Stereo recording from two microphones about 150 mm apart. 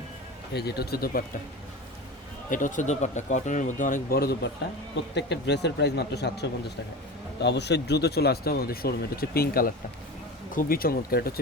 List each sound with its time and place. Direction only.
0.5 s speech: 90° left
2.5 s speech: 60° left (ahead or behind); by 4.4 s 85° left
5.5 s speech: 90° left